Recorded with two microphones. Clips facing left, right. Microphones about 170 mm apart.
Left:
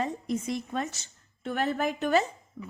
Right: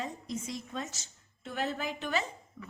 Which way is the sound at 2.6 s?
45° left (ahead or behind).